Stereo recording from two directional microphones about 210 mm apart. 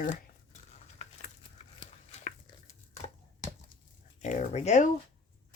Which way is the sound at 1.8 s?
30° left (ahead or behind).